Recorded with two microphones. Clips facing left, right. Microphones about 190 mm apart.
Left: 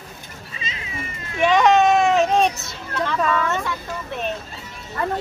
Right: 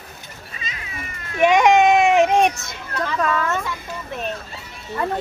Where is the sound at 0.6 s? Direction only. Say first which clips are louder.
Left 1 dB; 25° left (ahead or behind).